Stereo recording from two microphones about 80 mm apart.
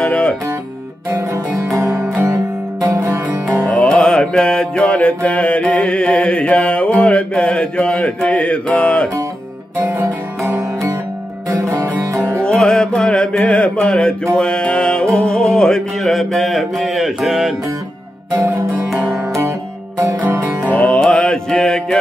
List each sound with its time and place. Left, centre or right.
0.0 s music: centre
1.1 s music: right
3.7 s mantra: centre
9.8 s music: right
12.4 s mantra: centre
18.9 s music: centre
20.6 s music: centre